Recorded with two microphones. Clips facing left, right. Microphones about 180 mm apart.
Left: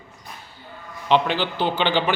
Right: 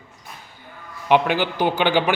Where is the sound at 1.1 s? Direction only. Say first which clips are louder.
Right 2 dB; 10° right (ahead or behind).